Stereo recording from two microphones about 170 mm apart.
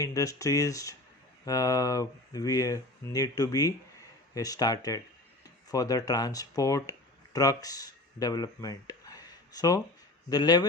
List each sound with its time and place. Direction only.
0.0 s speech: 20° left (ahead or behind)